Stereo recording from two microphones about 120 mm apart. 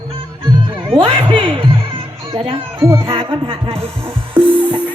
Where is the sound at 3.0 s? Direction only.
50° right (ahead or behind).